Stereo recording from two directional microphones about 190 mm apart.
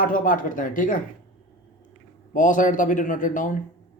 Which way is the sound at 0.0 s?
45° left (ahead or behind).